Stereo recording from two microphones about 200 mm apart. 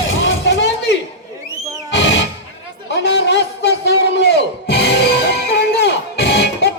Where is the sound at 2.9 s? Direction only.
60° left (ahead or behind).